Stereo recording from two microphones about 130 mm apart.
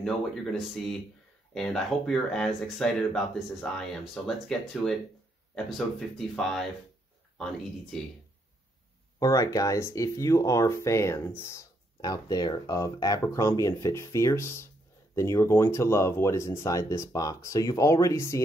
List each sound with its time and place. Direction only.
0.0 s speech: 5° left (ahead or behind)
9.2 s speech: 25° left (ahead or behind)
12.0 s speech: 30° left (ahead or behind)